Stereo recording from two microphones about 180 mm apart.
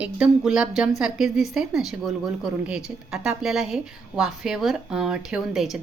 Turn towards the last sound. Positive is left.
turn(degrees=0)  # may be behind; listen again after turning